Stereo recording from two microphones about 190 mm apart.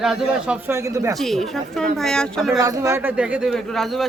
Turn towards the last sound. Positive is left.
turn(degrees=0)  # may be behind; listen again after turning